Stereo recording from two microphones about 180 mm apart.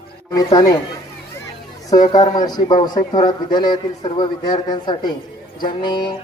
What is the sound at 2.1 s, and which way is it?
A man's voice, 20° left (ahead or behind).